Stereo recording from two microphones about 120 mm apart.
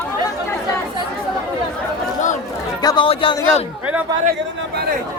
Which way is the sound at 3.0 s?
50° left (ahead or behind).